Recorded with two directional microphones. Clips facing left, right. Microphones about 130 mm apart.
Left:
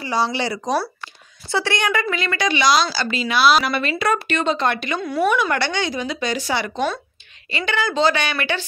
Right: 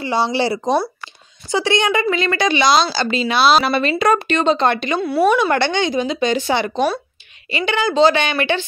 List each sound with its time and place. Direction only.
0.0 s speech: 25° right (ahead or behind)
1.5 s speech: 20° right (ahead or behind)